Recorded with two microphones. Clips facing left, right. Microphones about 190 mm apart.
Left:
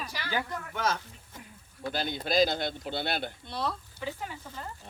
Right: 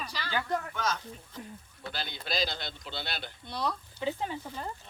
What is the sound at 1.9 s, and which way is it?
A man's voice, 45° left (ahead or behind).